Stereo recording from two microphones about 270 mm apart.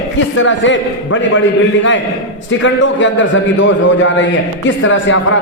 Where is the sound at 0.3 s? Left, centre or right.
Left.